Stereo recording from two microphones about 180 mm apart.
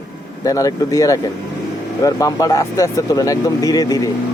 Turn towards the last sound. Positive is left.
turn(degrees=20)  # may be behind; listen again after turning